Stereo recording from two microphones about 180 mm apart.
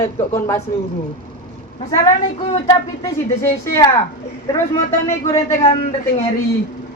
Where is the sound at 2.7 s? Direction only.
20° left (ahead or behind).